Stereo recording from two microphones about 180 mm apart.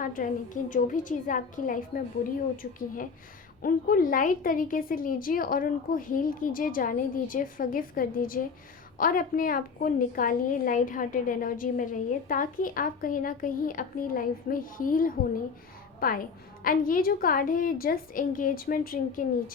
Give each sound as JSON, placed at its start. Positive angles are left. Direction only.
{"t": 0.0, "sound": "a woman's voice", "side_deg": 50}